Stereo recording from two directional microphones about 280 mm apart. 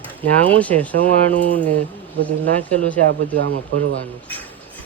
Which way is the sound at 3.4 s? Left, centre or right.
Right.